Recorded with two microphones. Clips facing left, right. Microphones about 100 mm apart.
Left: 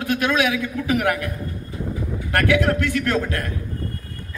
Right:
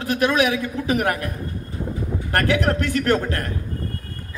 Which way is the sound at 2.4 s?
30° right (ahead or behind).